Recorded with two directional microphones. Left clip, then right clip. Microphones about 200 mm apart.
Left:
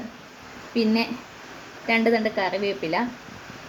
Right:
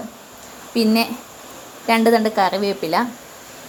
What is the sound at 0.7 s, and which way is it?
Speech, 15° right (ahead or behind).